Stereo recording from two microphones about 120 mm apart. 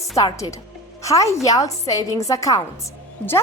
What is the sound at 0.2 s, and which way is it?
A woman's voice, 35° left (ahead or behind).